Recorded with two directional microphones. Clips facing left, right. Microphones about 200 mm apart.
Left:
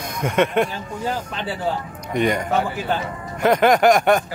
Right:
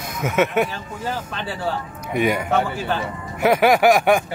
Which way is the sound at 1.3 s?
15° left (ahead or behind).